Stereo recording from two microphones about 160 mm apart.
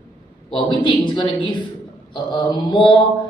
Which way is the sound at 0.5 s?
30° left (ahead or behind).